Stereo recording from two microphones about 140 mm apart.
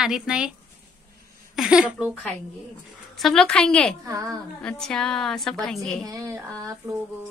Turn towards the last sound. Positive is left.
turn(degrees=-15)  # may be behind; listen again after turning